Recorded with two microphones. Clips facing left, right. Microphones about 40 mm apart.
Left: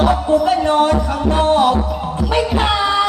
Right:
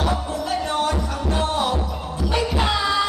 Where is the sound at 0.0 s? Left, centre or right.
Left.